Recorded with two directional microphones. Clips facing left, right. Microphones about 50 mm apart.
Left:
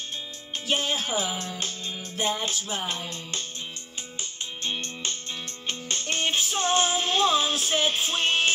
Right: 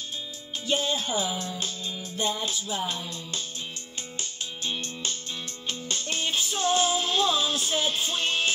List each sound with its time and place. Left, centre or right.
0.7 s speech: left
2.3 s music: left
4.6 s music: left